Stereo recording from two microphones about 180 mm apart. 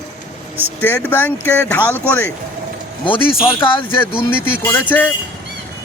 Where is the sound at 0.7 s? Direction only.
10° left (ahead or behind).